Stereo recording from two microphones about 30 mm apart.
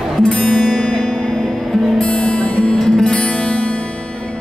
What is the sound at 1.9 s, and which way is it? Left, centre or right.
Music, left.